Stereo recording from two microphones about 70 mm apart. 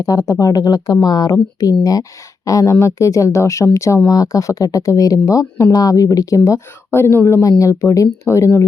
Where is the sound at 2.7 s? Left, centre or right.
Left.